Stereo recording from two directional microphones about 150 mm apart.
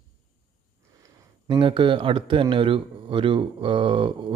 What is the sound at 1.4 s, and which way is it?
Speech, 35° right (ahead or behind).